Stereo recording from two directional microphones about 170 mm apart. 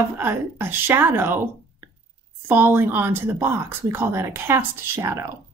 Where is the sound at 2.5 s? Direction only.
10° right (ahead or behind).